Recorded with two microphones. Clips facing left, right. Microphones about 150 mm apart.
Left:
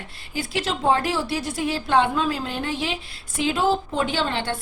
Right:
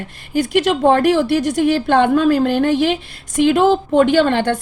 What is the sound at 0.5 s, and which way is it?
A woman's voice, 60° right (ahead or behind).